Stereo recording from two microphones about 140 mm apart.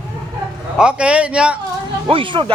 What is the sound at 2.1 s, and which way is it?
Speech, 40° right (ahead or behind).